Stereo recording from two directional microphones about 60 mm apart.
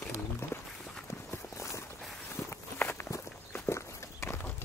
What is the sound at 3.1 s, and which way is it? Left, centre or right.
Walk, left.